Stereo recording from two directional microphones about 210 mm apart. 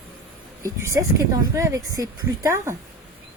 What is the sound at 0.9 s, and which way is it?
Speech, 15° right (ahead or behind).